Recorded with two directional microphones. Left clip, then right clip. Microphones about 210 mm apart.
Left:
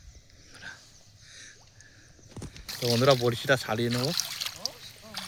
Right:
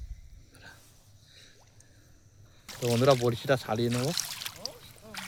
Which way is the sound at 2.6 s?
5° left (ahead or behind).